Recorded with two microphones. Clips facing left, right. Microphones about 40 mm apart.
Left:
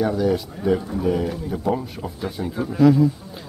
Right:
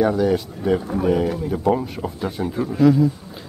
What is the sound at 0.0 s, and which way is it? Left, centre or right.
Speech, centre.